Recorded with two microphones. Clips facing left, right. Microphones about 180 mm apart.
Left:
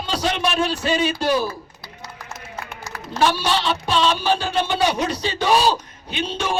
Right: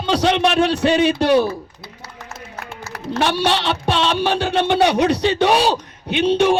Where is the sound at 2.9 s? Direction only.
65° right (ahead or behind).